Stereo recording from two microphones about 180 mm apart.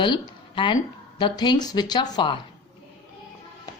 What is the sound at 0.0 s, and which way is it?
A woman's voice, 25° left (ahead or behind).